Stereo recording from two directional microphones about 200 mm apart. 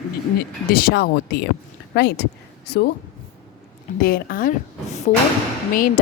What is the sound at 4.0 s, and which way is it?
A woman's voice, 45° left (ahead or behind).